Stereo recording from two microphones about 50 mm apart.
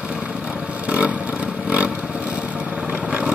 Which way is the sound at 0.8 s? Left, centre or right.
Right.